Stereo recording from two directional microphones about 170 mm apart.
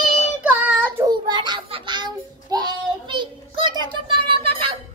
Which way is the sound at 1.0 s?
25° right (ahead or behind).